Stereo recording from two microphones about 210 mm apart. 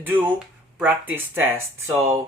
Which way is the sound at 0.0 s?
5° right (ahead or behind).